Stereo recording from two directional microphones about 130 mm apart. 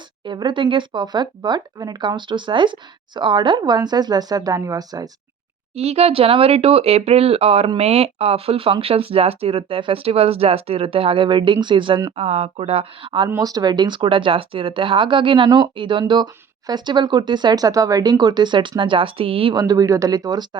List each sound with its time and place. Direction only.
0.3 s speech: 40° right (ahead or behind)
5.7 s speech: 50° right (ahead or behind); by 12.1 s 35° right (ahead or behind)
12.1 s speech: 55° right (ahead or behind)
13.4 s speech: 30° right (ahead or behind)
19.5 s speech: 30° right (ahead or behind)